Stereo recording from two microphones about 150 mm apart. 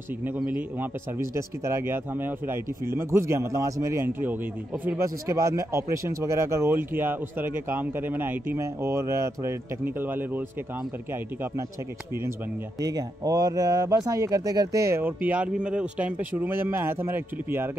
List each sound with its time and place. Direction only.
0.5 s speech: 10° right (ahead or behind)
12.8 s speech: 25° right (ahead or behind)